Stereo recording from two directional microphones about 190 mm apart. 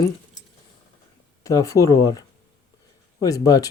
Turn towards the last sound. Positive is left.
turn(degrees=20)  # may be behind; listen again after turning